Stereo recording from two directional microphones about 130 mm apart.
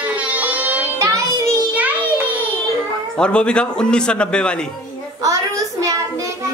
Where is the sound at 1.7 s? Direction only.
10° right (ahead or behind).